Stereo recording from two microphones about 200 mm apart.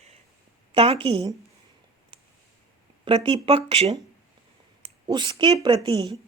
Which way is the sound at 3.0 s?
25° right (ahead or behind).